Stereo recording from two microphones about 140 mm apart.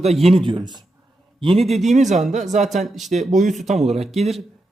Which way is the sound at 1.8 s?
55° right (ahead or behind).